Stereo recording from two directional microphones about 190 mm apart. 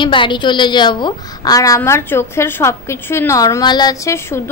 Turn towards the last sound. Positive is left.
turn(degrees=15)  # may be behind; listen again after turning